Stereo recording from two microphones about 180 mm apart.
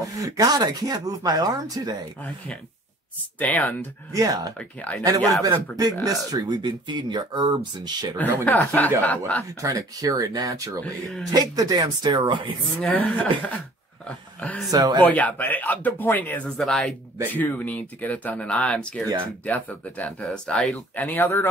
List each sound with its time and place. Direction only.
0.0 s speech: 20° right (ahead or behind)
3.3 s speech: 10° left (ahead or behind)
4.1 s speech: 20° right (ahead or behind)
4.6 s speech: 5° left (ahead or behind)
5.4 s speech: 20° right (ahead or behind)
8.5 s speech: 10° left (ahead or behind)
9.6 s speech: 20° right (ahead or behind)
12.8 s speech: 10° left (ahead or behind)
14.0 s dog: 5° left (ahead or behind)
14.7 s speech: 25° right (ahead or behind)
15.0 s speech: 10° left (ahead or behind)